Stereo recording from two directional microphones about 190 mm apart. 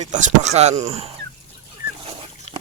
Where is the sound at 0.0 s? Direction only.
40° right (ahead or behind).